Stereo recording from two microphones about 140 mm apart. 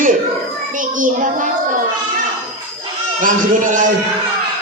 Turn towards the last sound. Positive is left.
turn(degrees=-70)  # may be behind; listen again after turning